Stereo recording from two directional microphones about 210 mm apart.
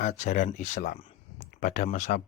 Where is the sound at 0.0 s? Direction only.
35° left (ahead or behind).